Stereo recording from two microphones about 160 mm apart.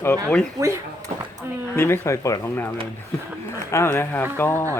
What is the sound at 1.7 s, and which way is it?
Speech, 15° left (ahead or behind).